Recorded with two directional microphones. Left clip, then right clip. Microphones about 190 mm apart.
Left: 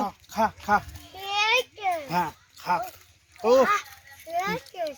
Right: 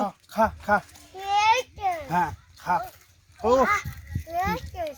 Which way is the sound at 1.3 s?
45° left (ahead or behind).